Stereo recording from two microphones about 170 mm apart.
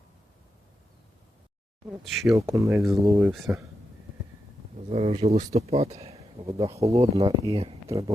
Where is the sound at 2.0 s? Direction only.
Centre (ahead or behind).